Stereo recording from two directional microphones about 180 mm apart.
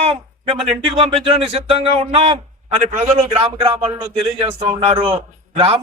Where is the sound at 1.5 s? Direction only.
35° right (ahead or behind).